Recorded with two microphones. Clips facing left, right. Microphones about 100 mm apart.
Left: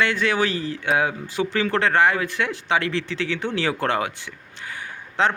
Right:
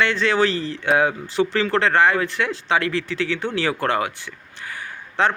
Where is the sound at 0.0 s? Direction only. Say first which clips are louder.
Right 2 dB; 15° left (ahead or behind).